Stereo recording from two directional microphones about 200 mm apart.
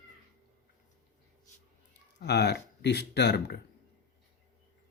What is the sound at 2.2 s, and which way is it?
Speech, 55° left (ahead or behind).